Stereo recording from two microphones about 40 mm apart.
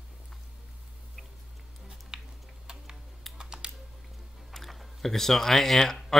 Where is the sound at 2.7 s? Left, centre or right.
Centre.